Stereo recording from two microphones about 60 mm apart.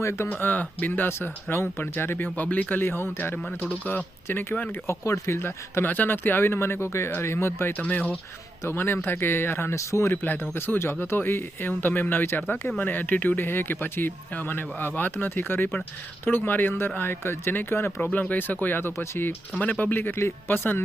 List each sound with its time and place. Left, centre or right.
0.0 s speech: left
0.3 s speech: left
3.3 s speech: left
4.3 s speech: left
4.7 s speech: left
5.4 s speech: left
7.8 s speech: left
8.7 s speech: left
10.1 s speech: left
18.0 s speech: left
19.5 s speech: left